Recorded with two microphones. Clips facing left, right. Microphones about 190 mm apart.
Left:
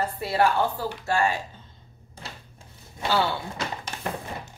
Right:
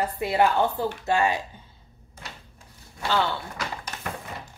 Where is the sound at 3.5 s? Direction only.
30° left (ahead or behind).